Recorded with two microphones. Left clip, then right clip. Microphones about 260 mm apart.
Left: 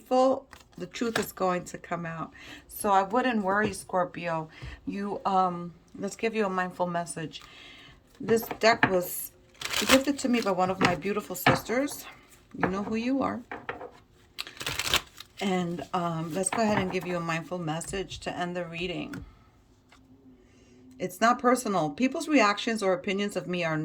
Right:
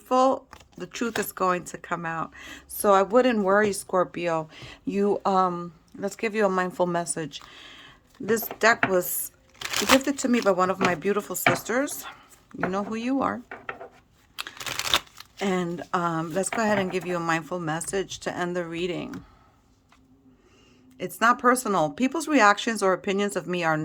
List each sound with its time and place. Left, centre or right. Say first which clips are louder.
0.1 s a sound: right 2 dB; centre
1.2 s speech: right 3 dB; centre
21.0 s speech: right 3 dB; centre